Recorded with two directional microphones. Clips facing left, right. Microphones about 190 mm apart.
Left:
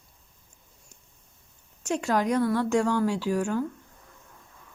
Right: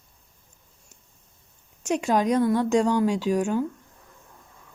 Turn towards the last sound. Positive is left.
turn(degrees=-20)  # may be behind; listen again after turning